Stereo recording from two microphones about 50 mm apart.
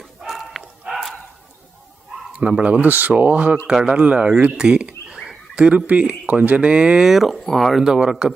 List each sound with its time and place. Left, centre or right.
0.3 s dog: centre
0.9 s a sound: centre
2.3 s speech: right
2.8 s speech: right
3.7 s speech: centre
4.0 s speech: right
4.5 s a sound: centre
5.5 s speech: right
7.0 s speech: centre
7.4 s speech: centre
7.9 s speech: centre